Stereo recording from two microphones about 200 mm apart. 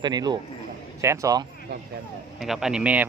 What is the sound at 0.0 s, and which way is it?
A man's voice, 20° right (ahead or behind).